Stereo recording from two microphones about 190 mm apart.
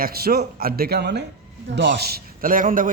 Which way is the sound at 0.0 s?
55° right (ahead or behind).